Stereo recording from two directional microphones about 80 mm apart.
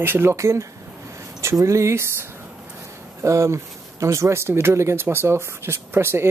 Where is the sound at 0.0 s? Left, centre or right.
Right.